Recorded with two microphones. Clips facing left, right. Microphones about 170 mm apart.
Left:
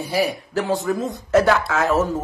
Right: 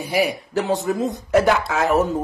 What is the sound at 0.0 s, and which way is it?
Speech, 15° right (ahead or behind).